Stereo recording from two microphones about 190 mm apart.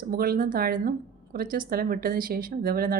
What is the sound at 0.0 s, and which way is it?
A woman's voice, 50° right (ahead or behind).